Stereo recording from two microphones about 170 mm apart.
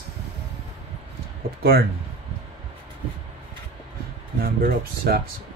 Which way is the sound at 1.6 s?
65° right (ahead or behind).